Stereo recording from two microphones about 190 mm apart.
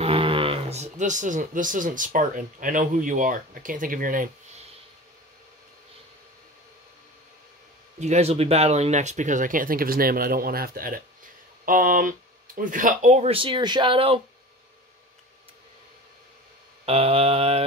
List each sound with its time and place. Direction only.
0.0 s speech: 30° right (ahead or behind)
8.0 s speech: 35° right (ahead or behind)
16.8 s speech: 30° right (ahead or behind)